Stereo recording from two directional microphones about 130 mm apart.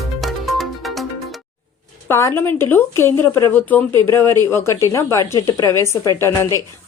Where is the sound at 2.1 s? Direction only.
20° left (ahead or behind).